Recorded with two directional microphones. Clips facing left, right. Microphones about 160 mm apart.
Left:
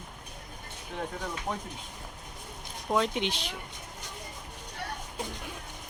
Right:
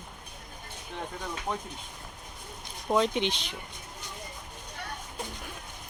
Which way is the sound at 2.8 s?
Centre (ahead or behind).